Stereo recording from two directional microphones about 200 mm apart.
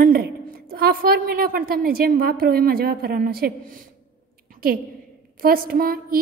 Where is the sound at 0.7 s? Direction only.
50° right (ahead or behind).